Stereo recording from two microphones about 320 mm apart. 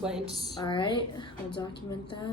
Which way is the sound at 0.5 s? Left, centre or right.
Centre.